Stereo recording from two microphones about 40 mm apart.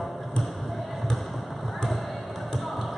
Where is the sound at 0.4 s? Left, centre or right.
Centre.